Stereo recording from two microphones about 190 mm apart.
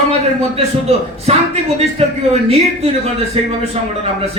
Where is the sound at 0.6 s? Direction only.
30° right (ahead or behind).